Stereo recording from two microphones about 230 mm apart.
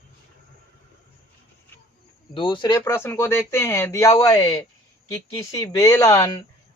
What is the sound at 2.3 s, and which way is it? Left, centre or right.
Speech, left.